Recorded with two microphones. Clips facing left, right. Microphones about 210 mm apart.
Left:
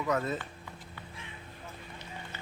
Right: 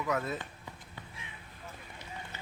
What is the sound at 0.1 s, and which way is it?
Speech, centre (ahead or behind).